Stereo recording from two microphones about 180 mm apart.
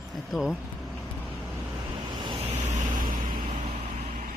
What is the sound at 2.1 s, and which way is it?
Vehicle, 25° right (ahead or behind).